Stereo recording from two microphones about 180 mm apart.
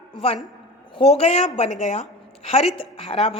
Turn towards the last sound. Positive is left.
turn(degrees=35)  # may be behind; listen again after turning